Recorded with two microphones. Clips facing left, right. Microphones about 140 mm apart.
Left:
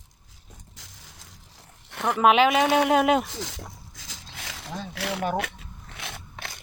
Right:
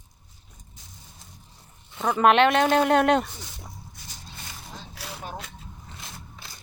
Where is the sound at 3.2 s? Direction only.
90° left.